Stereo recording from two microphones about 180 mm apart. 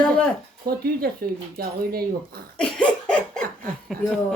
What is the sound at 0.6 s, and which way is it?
Speech, 60° right (ahead or behind).